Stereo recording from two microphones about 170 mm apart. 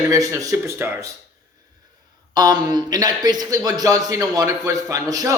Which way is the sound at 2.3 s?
25° right (ahead or behind).